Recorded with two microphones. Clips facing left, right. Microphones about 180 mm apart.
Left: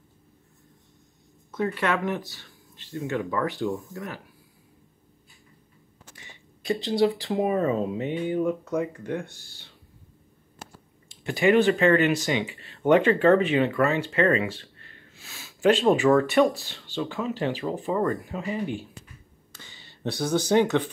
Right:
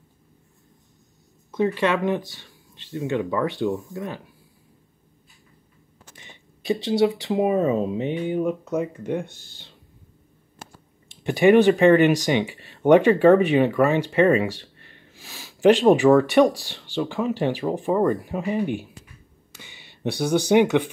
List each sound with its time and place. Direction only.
1.5 s speech: 20° right (ahead or behind)
6.1 s speech: 20° right (ahead or behind)
11.2 s speech: 15° right (ahead or behind)
19.5 s a sound: 15° right (ahead or behind)